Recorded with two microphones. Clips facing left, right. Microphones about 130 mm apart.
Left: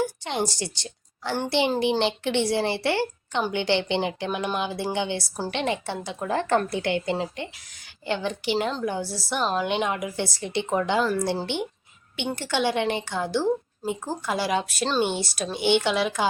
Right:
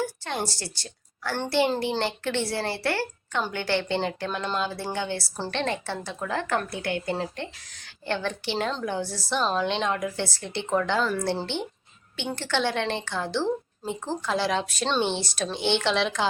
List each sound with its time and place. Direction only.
0.0 s a woman's voice: 15° left (ahead or behind)